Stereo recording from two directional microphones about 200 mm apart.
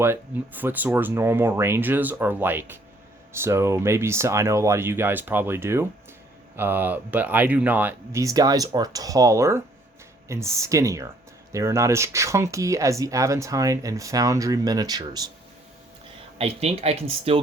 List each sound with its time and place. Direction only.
0.0 s speech: 10° right (ahead or behind)
16.4 s speech: 30° right (ahead or behind)